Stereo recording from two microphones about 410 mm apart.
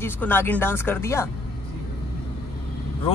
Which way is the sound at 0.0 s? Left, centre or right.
Centre.